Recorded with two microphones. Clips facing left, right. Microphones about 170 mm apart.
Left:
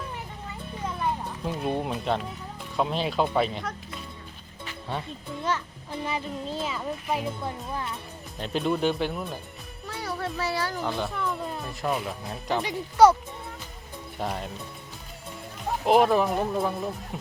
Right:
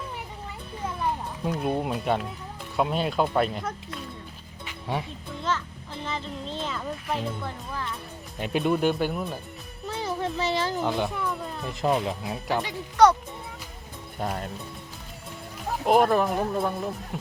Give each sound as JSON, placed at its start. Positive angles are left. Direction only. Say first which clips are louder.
{"t": 0.9, "sound": "speech", "louder": "even", "side_deg": 0}
{"t": 4.6, "sound": "music", "louder": "right 3 dB", "side_deg": -15}
{"t": 5.4, "sound": "child singing", "louder": "even", "side_deg": 15}
{"t": 6.1, "sound": "speech", "louder": "left 1 dB", "side_deg": 10}
{"t": 8.4, "sound": "speech", "louder": "right 2 dB", "side_deg": -10}
{"t": 9.8, "sound": "child singing", "louder": "right 3 dB", "side_deg": -20}
{"t": 10.8, "sound": "speech", "louder": "right 3 dB", "side_deg": -15}
{"t": 11.2, "sound": "music", "louder": "even", "side_deg": 0}
{"t": 11.7, "sound": "speech", "louder": "right 6 dB", "side_deg": -20}
{"t": 12.3, "sound": "speech", "louder": "left 1 dB", "side_deg": 0}
{"t": 14.2, "sound": "speech", "louder": "right 1 dB", "side_deg": 0}
{"t": 15.8, "sound": "speech", "louder": "even", "side_deg": 0}